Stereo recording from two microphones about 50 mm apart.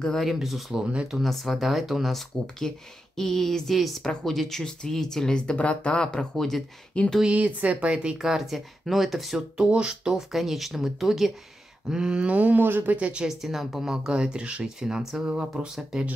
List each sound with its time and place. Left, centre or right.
0.2 s speech: centre
2.6 s speech: centre
6.3 s speech: centre
7.2 s speech: right
7.9 s speech: centre
9.7 s speech: centre
10.1 s speech: centre
12.3 s speech: right
12.9 s speech: right
13.3 s speech: centre
14.8 s speech: centre
15.6 s speech: right